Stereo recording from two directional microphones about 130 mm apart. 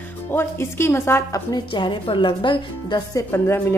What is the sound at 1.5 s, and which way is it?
Speech, 35° left (ahead or behind).